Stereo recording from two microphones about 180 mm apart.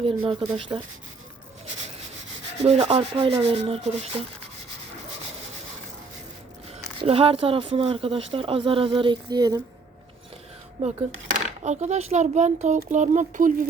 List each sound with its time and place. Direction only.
0.0 s speech: 30° right (ahead or behind)
2.6 s a child's voice: 35° right (ahead or behind)
7.0 s speech: 30° right (ahead or behind)
10.8 s a child's voice: 40° right (ahead or behind)